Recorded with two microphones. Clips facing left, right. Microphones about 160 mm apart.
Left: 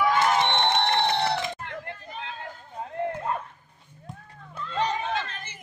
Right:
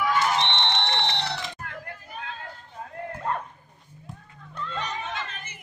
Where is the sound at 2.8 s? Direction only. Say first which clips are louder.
Left 4 dB; 25° left (ahead or behind).